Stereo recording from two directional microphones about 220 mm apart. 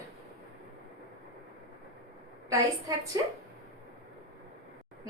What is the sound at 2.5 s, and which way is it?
Speech, 15° right (ahead or behind).